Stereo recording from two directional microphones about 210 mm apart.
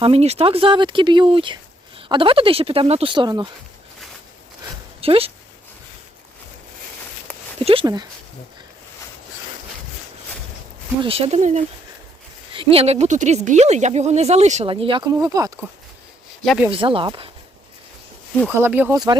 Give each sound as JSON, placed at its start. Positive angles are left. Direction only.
{"t": 0.0, "sound": "speech", "side_deg": -30}
{"t": 4.9, "sound": "speech", "side_deg": -25}
{"t": 7.6, "sound": "speech", "side_deg": -25}
{"t": 11.0, "sound": "speech", "side_deg": -30}
{"t": 16.4, "sound": "speech", "side_deg": 0}
{"t": 16.7, "sound": "speech", "side_deg": -25}
{"t": 18.4, "sound": "speech", "side_deg": -10}